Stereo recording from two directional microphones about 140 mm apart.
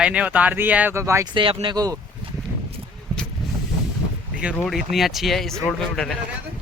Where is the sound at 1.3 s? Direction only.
40° right (ahead or behind).